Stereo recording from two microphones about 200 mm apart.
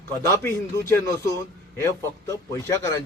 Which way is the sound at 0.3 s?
10° left (ahead or behind).